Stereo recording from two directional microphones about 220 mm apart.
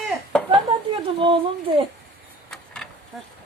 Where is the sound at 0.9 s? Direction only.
25° right (ahead or behind).